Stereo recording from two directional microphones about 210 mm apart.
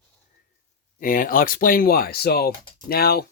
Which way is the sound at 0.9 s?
40° left (ahead or behind).